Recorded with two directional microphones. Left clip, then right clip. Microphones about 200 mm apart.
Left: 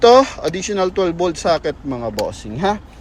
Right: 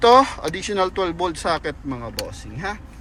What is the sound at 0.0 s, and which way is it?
Speech, 15° left (ahead or behind).